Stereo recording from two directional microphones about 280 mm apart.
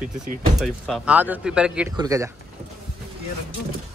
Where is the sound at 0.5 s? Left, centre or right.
Centre.